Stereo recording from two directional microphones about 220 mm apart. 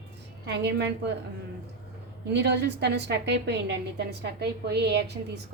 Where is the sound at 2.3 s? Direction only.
50° right (ahead or behind).